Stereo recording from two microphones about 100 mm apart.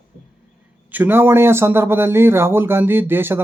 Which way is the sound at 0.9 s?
20° right (ahead or behind).